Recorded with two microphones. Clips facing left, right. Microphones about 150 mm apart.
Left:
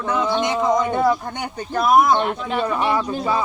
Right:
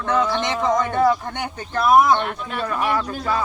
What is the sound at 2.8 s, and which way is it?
Speech, 20° left (ahead or behind).